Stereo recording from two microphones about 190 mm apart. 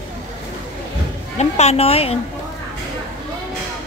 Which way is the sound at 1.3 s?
35° left (ahead or behind).